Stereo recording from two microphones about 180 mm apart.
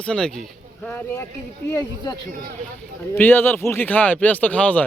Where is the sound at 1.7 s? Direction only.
20° left (ahead or behind).